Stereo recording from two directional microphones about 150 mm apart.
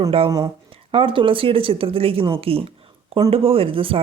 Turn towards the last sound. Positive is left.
turn(degrees=-35)  # may be behind; listen again after turning